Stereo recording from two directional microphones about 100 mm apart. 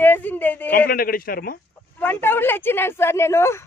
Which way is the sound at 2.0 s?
20° left (ahead or behind).